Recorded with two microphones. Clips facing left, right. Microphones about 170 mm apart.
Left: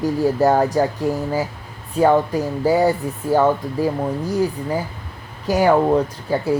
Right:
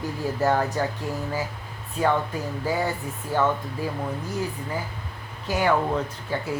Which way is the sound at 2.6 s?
35° left (ahead or behind).